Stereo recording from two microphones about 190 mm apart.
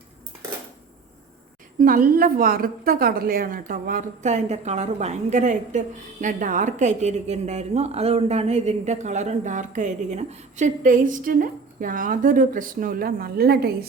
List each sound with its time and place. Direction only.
1.8 s a woman's voice: 45° right (ahead or behind)